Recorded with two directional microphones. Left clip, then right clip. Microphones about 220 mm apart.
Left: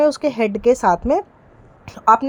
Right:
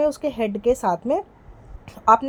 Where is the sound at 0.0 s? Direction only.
25° left (ahead or behind).